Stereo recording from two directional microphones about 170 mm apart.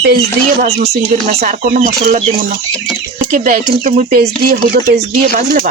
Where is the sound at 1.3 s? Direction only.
60° right (ahead or behind).